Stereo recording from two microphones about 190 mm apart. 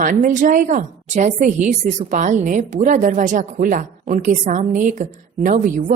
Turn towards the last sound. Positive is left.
turn(degrees=-45)  # may be behind; listen again after turning